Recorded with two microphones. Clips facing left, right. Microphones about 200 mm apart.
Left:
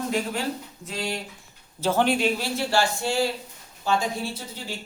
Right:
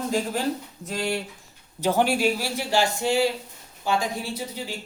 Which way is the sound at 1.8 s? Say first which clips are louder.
Even; 15° right (ahead or behind).